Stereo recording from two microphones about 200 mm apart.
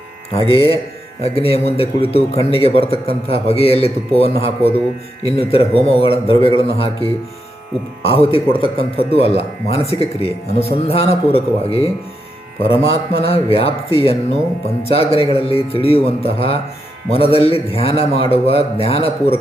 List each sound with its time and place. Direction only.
0.3 s a man's voice: 30° left (ahead or behind)